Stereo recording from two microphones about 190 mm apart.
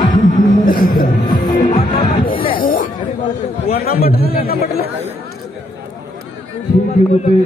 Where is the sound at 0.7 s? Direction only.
50° left (ahead or behind).